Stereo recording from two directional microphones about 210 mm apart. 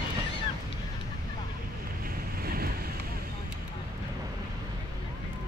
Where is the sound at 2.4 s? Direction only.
45° right (ahead or behind).